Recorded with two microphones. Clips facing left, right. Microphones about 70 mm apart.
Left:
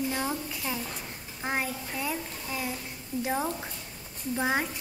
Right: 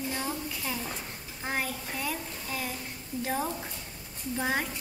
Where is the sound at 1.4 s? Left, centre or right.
Centre.